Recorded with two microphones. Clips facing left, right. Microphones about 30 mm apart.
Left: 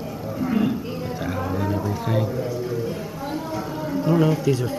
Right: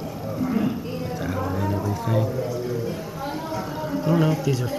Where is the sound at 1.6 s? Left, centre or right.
Centre.